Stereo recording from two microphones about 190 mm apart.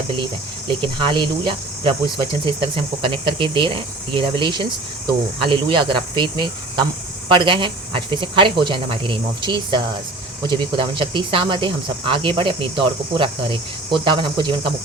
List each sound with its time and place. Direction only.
0.7 s speech: 25° right (ahead or behind)